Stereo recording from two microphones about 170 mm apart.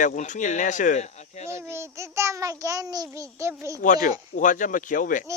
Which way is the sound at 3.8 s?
50° left (ahead or behind).